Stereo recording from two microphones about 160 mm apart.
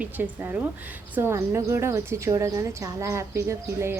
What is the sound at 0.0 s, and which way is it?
Speech, 10° right (ahead or behind).